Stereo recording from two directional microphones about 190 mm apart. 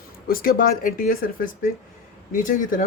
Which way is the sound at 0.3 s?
50° left (ahead or behind).